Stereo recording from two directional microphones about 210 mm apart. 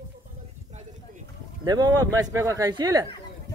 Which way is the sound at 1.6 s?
20° right (ahead or behind).